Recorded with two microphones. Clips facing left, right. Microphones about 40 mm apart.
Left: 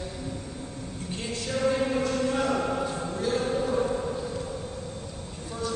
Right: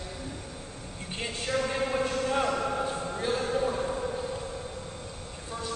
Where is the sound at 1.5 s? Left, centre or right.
Right.